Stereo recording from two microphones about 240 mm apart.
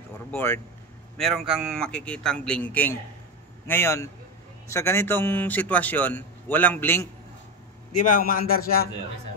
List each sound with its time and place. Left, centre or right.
0.3 s a man's voice: centre
7.9 s a man's voice: left